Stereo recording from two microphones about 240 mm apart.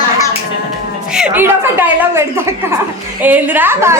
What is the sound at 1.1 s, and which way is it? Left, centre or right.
A woman's voice, centre.